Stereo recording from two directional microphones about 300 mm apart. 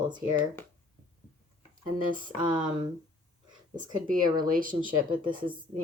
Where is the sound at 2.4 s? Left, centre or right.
Centre.